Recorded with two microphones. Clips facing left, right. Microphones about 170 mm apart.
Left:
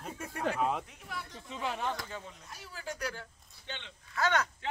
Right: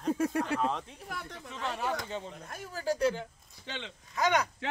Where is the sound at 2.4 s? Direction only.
50° right (ahead or behind).